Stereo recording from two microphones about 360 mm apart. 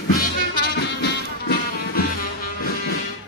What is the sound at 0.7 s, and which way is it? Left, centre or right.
Music, left.